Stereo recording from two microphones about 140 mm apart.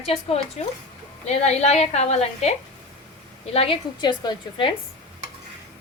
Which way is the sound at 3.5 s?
40° left (ahead or behind).